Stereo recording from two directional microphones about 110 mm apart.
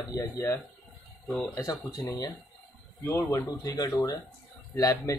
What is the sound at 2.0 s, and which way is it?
Speech, 35° left (ahead or behind).